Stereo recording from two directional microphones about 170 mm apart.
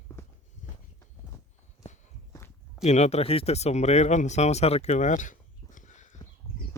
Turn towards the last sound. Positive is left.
turn(degrees=45)  # may be behind; listen again after turning